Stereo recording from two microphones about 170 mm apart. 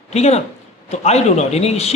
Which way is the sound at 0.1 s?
40° left (ahead or behind).